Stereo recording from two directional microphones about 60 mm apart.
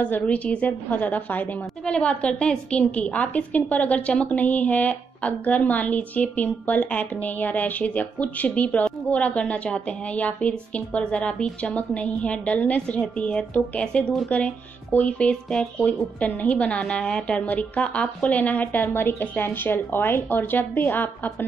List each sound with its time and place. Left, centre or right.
0.0 s speech: left
1.9 s speech: centre; by 21.5 s left